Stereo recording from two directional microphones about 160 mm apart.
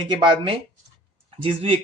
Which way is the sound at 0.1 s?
30° right (ahead or behind).